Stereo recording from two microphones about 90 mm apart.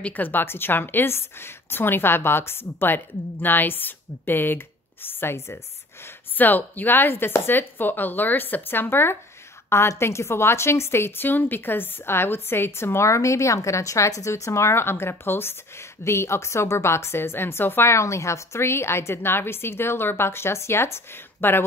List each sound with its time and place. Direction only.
0.0 s a woman's voice: 20° left (ahead or behind)